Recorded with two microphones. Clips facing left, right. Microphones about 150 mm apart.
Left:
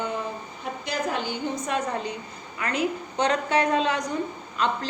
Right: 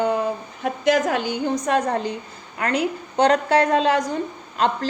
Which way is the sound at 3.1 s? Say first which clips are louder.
Right 7 dB; 35° right (ahead or behind).